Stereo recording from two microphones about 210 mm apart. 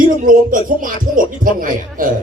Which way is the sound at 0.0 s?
40° right (ahead or behind).